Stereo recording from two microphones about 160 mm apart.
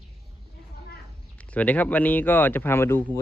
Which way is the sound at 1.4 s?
10° left (ahead or behind).